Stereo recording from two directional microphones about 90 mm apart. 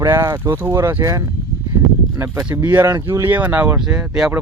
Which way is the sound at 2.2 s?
30° right (ahead or behind).